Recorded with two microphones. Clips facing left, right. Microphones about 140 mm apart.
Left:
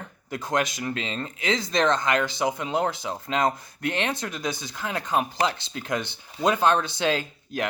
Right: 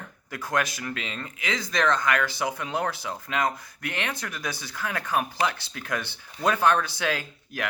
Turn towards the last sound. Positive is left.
turn(degrees=25)  # may be behind; listen again after turning